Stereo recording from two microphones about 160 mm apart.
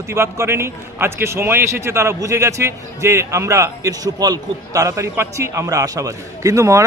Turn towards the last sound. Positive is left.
turn(degrees=-20)  # may be behind; listen again after turning